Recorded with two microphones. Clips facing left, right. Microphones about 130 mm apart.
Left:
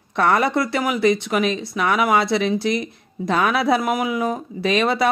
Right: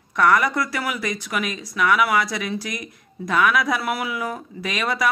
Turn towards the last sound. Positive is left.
turn(degrees=30)  # may be behind; listen again after turning